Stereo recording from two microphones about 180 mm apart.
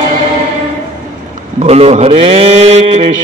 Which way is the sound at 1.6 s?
35° right (ahead or behind).